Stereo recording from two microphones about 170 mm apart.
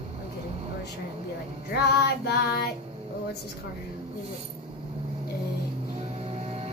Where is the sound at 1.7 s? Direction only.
70° left (ahead or behind).